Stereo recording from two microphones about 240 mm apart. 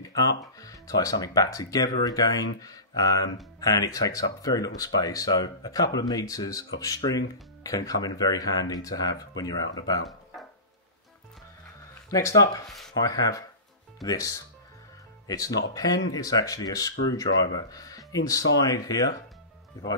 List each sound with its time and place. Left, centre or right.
0.6 s speech: centre
12.1 s speech: centre
12.6 s speech: centre
12.9 s speech: centre